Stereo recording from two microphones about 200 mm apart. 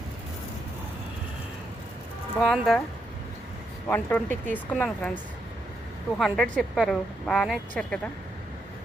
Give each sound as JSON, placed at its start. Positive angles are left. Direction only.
{"t": 2.4, "sound": "a woman's voice", "side_deg": 5}
{"t": 3.8, "sound": "speech", "side_deg": 10}
{"t": 6.1, "sound": "a woman's voice", "side_deg": 0}